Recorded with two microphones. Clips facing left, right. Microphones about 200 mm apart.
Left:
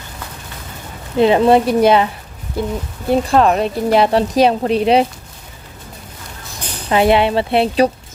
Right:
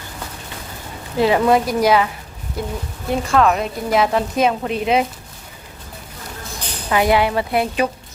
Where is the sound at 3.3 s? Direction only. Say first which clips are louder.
Even; 35° left (ahead or behind).